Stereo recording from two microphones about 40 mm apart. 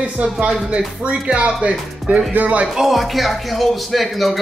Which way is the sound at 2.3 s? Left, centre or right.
Right.